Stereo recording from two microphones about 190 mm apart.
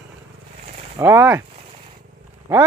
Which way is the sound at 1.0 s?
10° right (ahead or behind).